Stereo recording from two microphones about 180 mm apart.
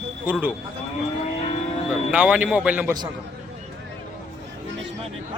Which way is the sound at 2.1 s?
5° right (ahead or behind).